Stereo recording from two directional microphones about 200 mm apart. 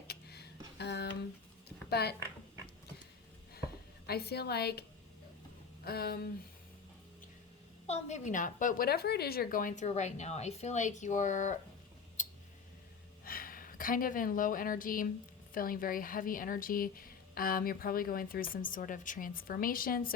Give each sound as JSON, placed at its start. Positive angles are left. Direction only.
{"t": 0.1, "sound": "a sound", "side_deg": 55}
{"t": 1.9, "sound": "a woman's voice", "side_deg": 55}
{"t": 4.0, "sound": "speech", "side_deg": 50}
{"t": 7.9, "sound": "a woman's voice", "side_deg": 35}
{"t": 13.2, "sound": "a woman's voice", "side_deg": 45}